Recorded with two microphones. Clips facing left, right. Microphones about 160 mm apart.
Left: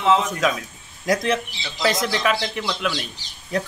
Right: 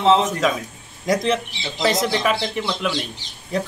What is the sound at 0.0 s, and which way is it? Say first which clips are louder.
Speech: right 3 dB; 30° right (ahead or behind).